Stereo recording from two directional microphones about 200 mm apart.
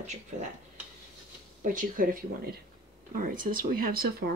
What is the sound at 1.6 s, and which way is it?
Speech, 45° right (ahead or behind).